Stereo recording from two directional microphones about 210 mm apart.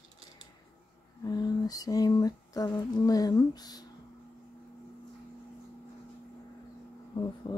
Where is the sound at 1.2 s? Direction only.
20° left (ahead or behind).